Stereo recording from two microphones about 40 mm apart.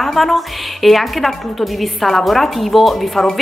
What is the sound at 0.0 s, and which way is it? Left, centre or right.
A woman's voice, centre.